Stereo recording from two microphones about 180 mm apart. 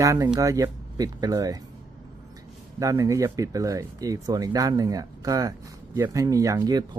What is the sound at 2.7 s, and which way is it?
Speech, 20° right (ahead or behind).